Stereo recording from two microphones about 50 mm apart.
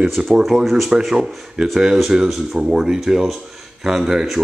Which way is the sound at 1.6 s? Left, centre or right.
Centre.